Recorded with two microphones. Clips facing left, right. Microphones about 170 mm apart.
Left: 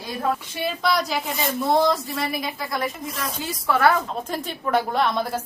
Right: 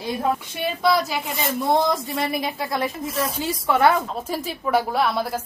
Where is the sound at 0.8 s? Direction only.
Centre (ahead or behind).